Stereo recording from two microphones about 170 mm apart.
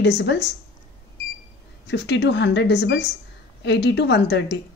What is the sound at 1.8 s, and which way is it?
Speech, 90° left.